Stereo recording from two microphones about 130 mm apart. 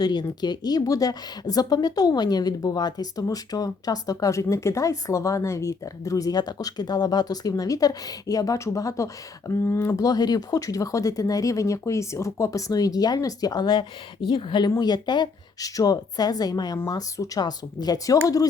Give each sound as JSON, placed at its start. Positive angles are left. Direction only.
{"t": 0.0, "sound": "a woman's voice", "side_deg": 35}